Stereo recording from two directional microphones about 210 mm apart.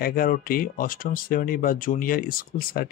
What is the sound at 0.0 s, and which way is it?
Speech, 45° left (ahead or behind).